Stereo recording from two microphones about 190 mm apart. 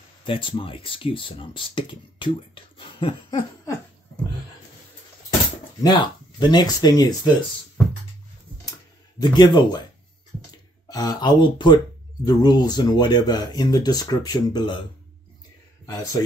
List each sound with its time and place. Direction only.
0.2 s speech: 25° left (ahead or behind)
5.8 s speech: 25° left (ahead or behind)
9.2 s speech: 20° left (ahead or behind)
10.9 s speech: 20° left (ahead or behind)